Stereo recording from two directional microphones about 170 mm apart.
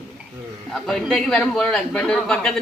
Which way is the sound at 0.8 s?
5° left (ahead or behind).